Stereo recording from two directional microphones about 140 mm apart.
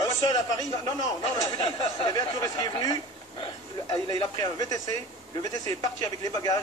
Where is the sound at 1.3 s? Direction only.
35° left (ahead or behind).